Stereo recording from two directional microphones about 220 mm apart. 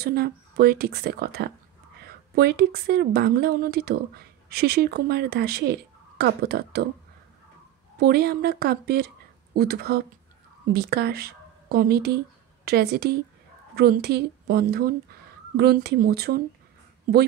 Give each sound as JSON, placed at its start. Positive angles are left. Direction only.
{"t": 0.0, "sound": "speech", "side_deg": -45}
{"t": 8.0, "sound": "a woman's voice", "side_deg": -45}